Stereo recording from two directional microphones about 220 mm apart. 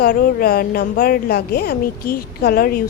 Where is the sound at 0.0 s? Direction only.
40° left (ahead or behind).